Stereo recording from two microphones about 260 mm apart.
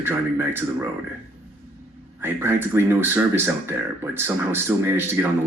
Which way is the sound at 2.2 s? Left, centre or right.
Centre.